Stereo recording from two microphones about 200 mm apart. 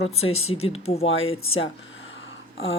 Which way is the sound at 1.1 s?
85° left.